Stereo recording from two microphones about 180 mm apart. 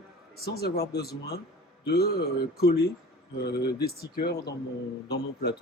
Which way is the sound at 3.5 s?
60° left (ahead or behind).